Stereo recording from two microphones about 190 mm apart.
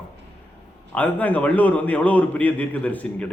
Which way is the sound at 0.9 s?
10° left (ahead or behind).